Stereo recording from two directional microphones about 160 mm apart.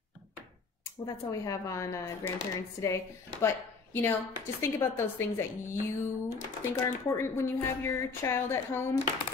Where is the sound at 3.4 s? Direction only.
15° left (ahead or behind).